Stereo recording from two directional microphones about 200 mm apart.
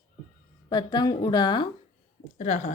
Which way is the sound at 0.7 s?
20° left (ahead or behind).